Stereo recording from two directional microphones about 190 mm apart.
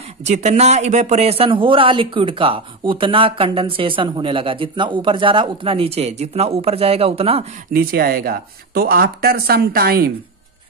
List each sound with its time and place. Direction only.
0.2 s speech: 35° right (ahead or behind)
7.7 s speech: 50° right (ahead or behind)